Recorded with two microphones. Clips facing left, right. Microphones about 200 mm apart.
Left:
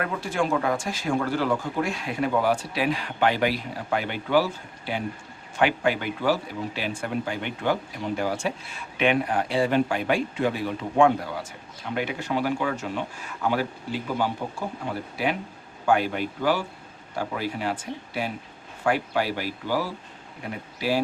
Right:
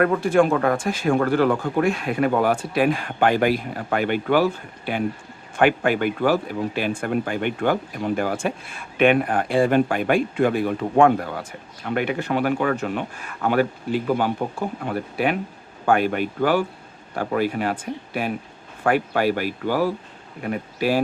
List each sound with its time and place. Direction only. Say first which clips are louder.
0.0 s speech: right 9 dB; 55° right (ahead or behind)